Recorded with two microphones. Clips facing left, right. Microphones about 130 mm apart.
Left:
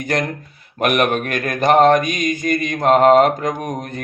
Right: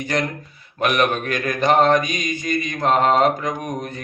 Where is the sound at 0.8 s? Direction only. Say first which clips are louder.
Left 2 dB; 50° left (ahead or behind).